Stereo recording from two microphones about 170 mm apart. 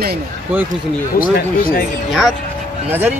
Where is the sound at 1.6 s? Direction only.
60° left (ahead or behind).